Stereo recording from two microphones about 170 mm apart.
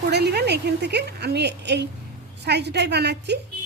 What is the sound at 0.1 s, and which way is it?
A woman's voice, 75° right (ahead or behind).